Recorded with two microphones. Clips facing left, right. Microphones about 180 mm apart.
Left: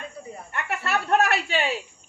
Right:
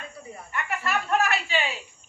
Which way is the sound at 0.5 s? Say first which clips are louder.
Left 1 dB; 65° left (ahead or behind).